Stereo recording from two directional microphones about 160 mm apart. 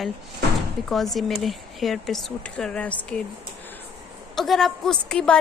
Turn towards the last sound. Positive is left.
turn(degrees=5)  # may be behind; listen again after turning